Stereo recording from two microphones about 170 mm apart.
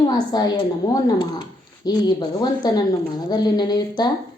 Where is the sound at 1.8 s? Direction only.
25° left (ahead or behind).